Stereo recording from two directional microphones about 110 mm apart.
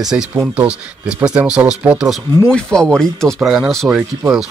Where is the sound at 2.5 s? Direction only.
5° left (ahead or behind).